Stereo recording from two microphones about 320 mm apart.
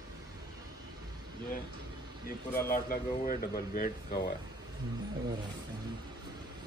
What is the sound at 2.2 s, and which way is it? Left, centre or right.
Speech, left.